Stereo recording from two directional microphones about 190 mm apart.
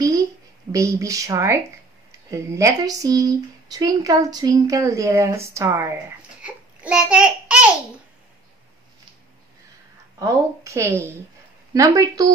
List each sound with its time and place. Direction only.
0.7 s speech: 15° right (ahead or behind)
10.1 s speech: 15° right (ahead or behind)